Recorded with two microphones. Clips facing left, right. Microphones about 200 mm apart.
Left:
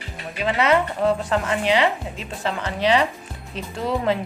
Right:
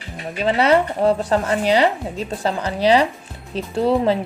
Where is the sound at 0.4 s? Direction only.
35° right (ahead or behind).